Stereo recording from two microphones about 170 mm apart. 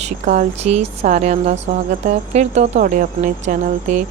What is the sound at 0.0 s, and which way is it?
A woman's voice, 40° right (ahead or behind).